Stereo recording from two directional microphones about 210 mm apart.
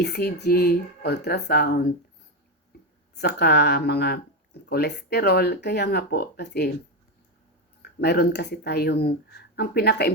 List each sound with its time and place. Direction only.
0.0 s speech: 50° left (ahead or behind)
3.2 s speech: 55° left (ahead or behind)
7.8 s speech: 50° left (ahead or behind)